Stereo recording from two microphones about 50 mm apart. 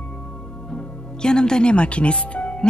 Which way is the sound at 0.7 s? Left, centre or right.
Centre.